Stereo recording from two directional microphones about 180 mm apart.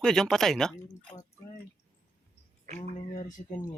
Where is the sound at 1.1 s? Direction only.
25° left (ahead or behind).